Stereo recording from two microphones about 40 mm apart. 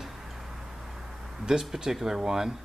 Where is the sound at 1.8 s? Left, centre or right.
Centre.